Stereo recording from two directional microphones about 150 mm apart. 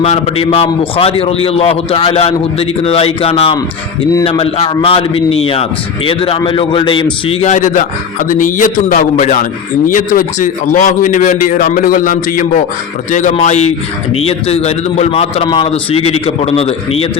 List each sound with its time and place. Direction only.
0.0 s a man's voice: 45° left (ahead or behind)